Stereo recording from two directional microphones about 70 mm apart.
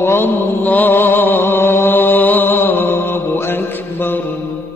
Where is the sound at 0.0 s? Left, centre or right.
Left.